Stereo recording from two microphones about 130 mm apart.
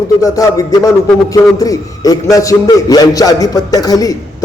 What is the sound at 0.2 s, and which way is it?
A man's voice, 25° left (ahead or behind).